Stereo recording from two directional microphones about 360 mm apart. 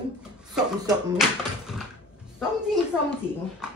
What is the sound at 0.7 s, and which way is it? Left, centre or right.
Speech, centre.